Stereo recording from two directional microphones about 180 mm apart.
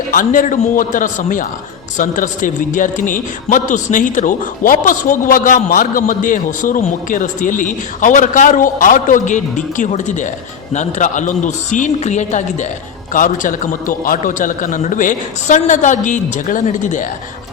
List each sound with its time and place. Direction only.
0.1 s speech: 50° left (ahead or behind)